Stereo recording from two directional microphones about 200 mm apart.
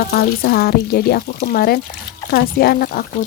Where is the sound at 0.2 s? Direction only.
50° left (ahead or behind).